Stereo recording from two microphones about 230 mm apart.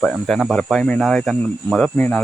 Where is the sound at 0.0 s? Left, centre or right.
Centre.